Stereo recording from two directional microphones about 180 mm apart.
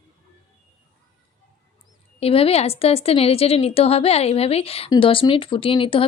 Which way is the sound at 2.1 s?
35° left (ahead or behind).